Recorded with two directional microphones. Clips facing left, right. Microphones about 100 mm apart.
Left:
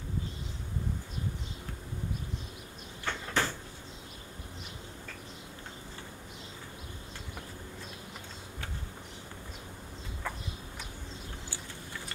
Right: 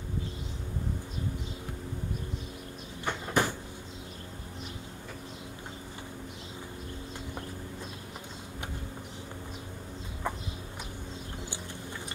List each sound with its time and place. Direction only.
3.1 s cupboard open or close: 15° right (ahead or behind)
10.3 s chicken: 20° right (ahead or behind)